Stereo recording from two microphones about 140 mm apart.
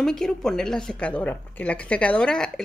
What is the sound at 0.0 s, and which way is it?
Speech, 5° left (ahead or behind).